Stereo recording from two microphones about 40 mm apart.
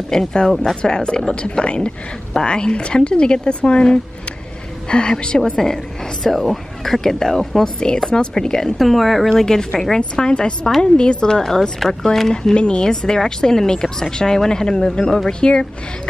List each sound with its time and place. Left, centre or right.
0.1 s speech: centre
5.4 s speech: centre
8.7 s speech: centre
9.4 s speech: centre
12.5 s speech: left